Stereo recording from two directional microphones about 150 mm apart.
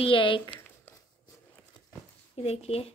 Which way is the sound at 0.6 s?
15° left (ahead or behind).